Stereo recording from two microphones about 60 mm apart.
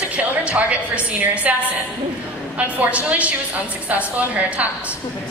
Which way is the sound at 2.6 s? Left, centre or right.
Right.